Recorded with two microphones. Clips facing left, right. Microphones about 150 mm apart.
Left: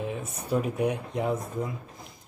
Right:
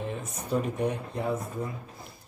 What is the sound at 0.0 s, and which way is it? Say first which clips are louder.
Speech: left 2 dB; 10° left (ahead or behind).